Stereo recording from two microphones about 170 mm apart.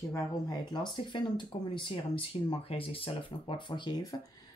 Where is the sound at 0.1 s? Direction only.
25° left (ahead or behind).